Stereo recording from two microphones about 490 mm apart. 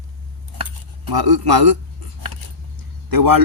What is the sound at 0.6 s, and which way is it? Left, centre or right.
Cutlery, right.